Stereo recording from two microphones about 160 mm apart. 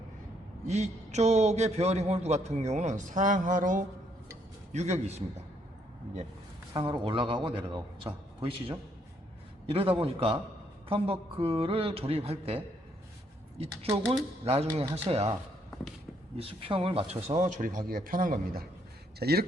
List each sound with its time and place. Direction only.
0.7 s a man's voice: 45° right (ahead or behind)
6.7 s a man's voice: 30° right (ahead or behind)
16.4 s a man's voice: 35° right (ahead or behind)
17.4 s speech: 55° right (ahead or behind)
19.2 s speech: 80° right